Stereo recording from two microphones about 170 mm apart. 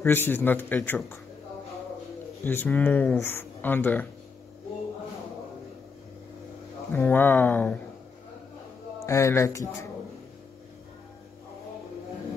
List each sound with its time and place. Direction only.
0.0 s speech: 10° left (ahead or behind)
2.4 s speech: 10° left (ahead or behind)
6.9 s speech: 10° left (ahead or behind)
9.0 s speech: 15° left (ahead or behind)